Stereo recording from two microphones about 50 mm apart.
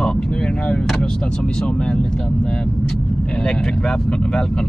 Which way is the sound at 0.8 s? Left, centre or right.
Centre.